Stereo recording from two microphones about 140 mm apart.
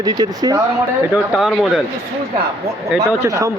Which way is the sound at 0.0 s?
30° right (ahead or behind).